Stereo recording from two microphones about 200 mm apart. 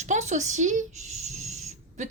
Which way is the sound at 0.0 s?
35° right (ahead or behind).